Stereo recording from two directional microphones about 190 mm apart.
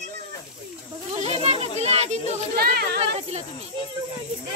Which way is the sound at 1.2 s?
35° right (ahead or behind).